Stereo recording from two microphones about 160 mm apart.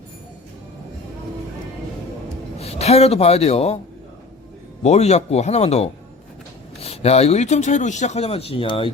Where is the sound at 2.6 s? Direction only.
40° left (ahead or behind).